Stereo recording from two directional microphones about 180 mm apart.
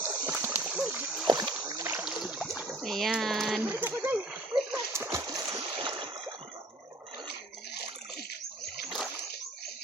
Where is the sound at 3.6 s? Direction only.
10° right (ahead or behind).